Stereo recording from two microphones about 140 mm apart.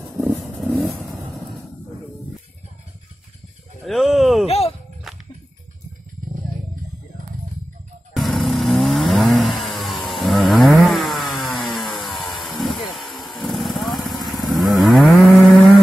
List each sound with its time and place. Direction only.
0.0 s vehicle: centre (ahead or behind)
3.8 s a sound: centre (ahead or behind)
4.5 s a sound: 45° left (ahead or behind)
5.1 s music: centre (ahead or behind)
8.1 s vehicle: centre (ahead or behind)
14.2 s moo: centre (ahead or behind)